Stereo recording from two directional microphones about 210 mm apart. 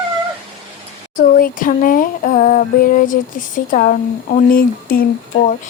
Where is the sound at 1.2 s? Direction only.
40° left (ahead or behind).